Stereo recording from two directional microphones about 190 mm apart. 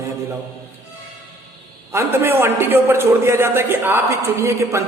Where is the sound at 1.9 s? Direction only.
15° right (ahead or behind).